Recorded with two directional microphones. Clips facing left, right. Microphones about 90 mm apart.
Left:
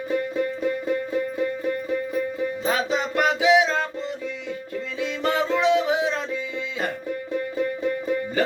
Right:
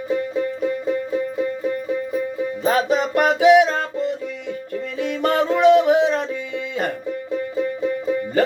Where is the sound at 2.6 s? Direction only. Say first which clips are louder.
Right 7 dB; 45° right (ahead or behind).